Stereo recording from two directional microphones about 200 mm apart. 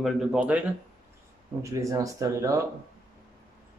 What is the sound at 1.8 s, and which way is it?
Speech, 15° right (ahead or behind).